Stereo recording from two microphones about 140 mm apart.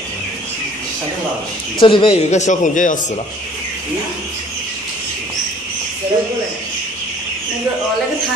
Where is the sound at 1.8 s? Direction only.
40° left (ahead or behind).